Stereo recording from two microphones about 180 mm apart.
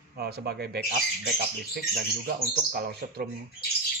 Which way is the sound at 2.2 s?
55° right (ahead or behind).